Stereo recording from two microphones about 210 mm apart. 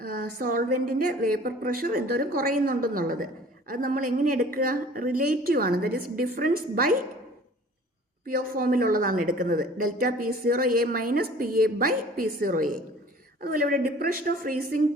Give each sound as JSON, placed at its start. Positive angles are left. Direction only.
{"t": 0.0, "sound": "a woman's voice", "side_deg": -45}
{"t": 8.3, "sound": "a woman's voice", "side_deg": -45}